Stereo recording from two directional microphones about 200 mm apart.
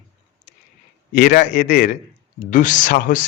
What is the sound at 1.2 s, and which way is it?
Speech, 40° left (ahead or behind).